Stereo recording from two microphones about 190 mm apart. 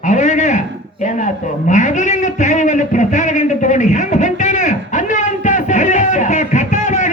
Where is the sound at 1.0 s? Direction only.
40° left (ahead or behind).